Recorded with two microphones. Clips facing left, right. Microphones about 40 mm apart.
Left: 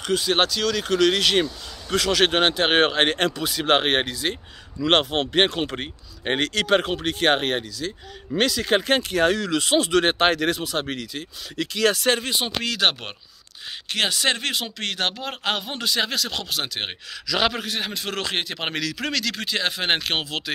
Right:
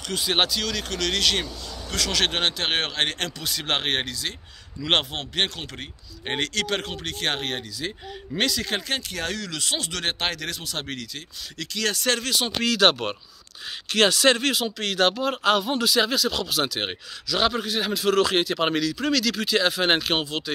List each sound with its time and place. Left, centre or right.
0.1 s a man's voice: centre; by 4.4 s left
4.7 s speech: centre
5.1 s speech: left
6.2 s a man's voice: centre
8.3 s speech: centre
8.8 s a man's voice: left
16.1 s speech: left
18.8 s speech: left
19.0 s speech: left
20.0 s speech: left